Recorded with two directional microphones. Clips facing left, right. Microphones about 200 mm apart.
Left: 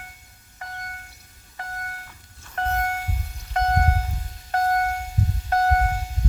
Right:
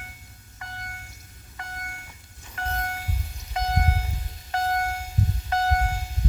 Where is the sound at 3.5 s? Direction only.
55° left (ahead or behind).